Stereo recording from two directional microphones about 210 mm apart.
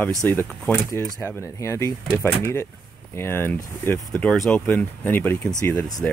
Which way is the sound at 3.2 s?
10° left (ahead or behind).